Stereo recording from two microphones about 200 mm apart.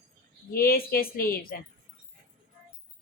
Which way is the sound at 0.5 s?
50° left (ahead or behind).